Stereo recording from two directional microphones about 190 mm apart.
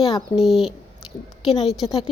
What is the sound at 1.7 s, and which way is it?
Speech, centre (ahead or behind).